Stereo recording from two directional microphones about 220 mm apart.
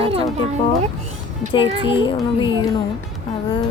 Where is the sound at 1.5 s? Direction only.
25° left (ahead or behind).